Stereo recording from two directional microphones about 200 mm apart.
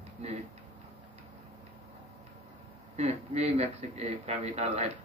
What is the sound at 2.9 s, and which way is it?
Speech, 35° right (ahead or behind).